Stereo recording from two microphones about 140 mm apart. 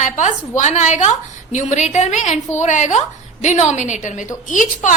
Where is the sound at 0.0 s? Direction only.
60° left (ahead or behind).